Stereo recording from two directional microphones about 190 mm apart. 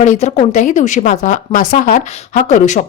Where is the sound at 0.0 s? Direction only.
35° left (ahead or behind).